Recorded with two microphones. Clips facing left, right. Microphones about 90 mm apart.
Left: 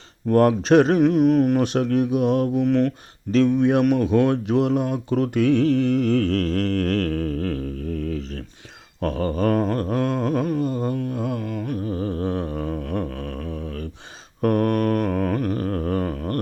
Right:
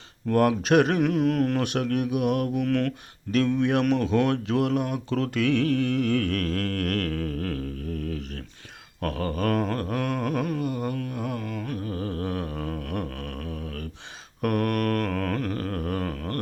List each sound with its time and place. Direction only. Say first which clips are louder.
0.3 s speech: left 5 dB; 35° left (ahead or behind)
9.0 s humming: left 5 dB; 25° left (ahead or behind)
14.4 s mantra: left 5 dB; 30° left (ahead or behind)